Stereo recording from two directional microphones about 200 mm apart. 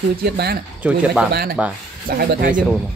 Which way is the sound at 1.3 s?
50° right (ahead or behind).